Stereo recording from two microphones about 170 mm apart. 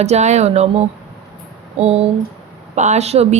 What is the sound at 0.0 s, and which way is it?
Speech, 40° right (ahead or behind).